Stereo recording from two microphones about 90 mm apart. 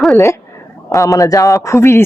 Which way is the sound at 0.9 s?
35° left (ahead or behind).